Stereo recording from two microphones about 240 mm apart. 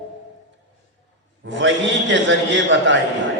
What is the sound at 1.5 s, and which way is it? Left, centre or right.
Mantra, right.